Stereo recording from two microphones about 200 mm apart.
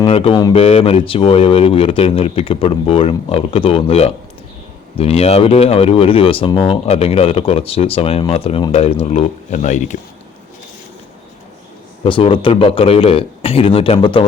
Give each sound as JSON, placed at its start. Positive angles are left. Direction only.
{"t": 0.0, "sound": "speech", "side_deg": 30}
{"t": 12.0, "sound": "speech", "side_deg": 25}